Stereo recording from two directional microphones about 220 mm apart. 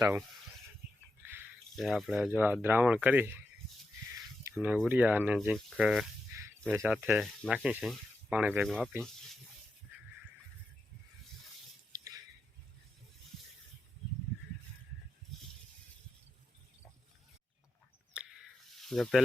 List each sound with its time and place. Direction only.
1.3 s speech: 5° right (ahead or behind)
4.6 s speech: 5° right (ahead or behind)
11.9 s drip: 15° right (ahead or behind)
18.1 s a sound: 5° right (ahead or behind)
18.8 s speech: centre (ahead or behind)